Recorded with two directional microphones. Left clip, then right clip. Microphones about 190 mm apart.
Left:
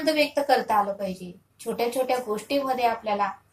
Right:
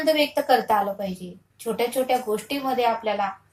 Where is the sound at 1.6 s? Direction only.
10° right (ahead or behind).